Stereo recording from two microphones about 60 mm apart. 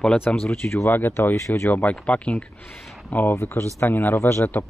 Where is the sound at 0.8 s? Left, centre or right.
Left.